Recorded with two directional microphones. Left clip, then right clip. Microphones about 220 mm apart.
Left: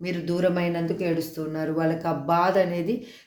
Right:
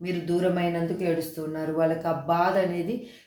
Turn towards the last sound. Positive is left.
turn(degrees=40)  # may be behind; listen again after turning